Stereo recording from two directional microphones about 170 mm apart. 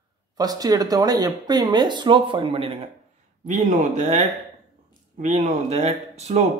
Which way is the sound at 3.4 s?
45° right (ahead or behind).